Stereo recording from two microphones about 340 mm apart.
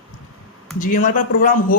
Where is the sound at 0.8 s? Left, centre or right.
Left.